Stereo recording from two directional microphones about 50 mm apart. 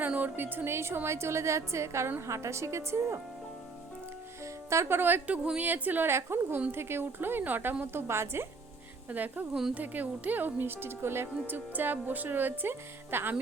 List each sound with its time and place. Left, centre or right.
0.0 s a woman's voice: right
2.2 s a woman's voice: right
4.9 s a woman's voice: right
6.1 s a woman's voice: right
6.7 s speech: right
8.0 s a woman's voice: right
9.0 s a woman's voice: right